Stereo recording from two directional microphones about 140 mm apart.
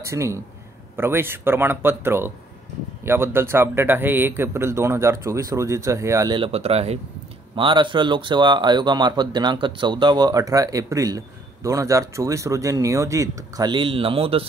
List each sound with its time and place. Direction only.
0.0 s speech: 20° right (ahead or behind)
6.3 s speech: 45° right (ahead or behind)
7.5 s speech: 35° right (ahead or behind)
13.7 s speech: 35° right (ahead or behind)